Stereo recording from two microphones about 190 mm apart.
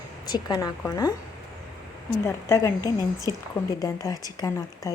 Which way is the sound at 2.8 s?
20° right (ahead or behind).